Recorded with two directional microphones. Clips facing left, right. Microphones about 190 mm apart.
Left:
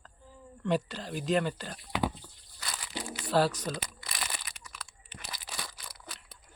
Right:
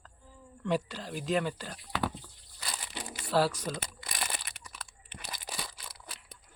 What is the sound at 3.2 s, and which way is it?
Speech, 5° right (ahead or behind).